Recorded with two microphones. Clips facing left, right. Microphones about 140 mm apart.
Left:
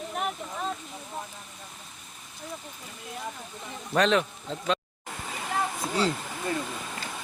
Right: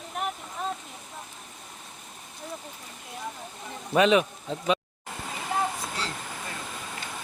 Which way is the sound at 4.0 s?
10° right (ahead or behind).